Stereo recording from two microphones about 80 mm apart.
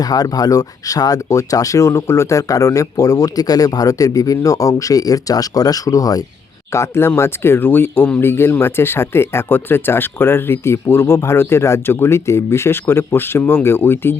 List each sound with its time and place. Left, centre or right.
0.0 s speech: left
6.7 s speech: left